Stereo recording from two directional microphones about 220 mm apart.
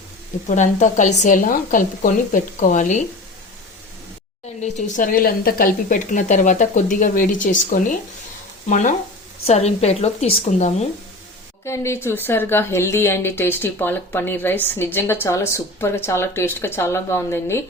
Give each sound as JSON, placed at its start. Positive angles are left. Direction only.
{"t": 0.4, "sound": "a woman's voice", "side_deg": 35}
{"t": 4.6, "sound": "a woman's voice", "side_deg": 35}
{"t": 9.5, "sound": "a woman's voice", "side_deg": 30}
{"t": 11.6, "sound": "a woman's voice", "side_deg": 10}